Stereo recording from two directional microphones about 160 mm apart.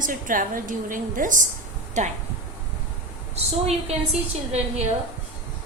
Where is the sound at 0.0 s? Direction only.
55° right (ahead or behind).